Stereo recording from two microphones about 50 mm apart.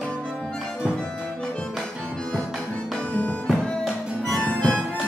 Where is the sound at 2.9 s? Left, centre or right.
Left.